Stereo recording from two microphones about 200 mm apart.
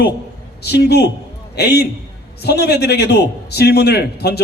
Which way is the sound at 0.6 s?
55° left (ahead or behind).